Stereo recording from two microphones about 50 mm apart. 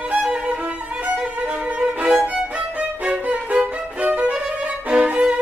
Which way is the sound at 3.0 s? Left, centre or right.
Right.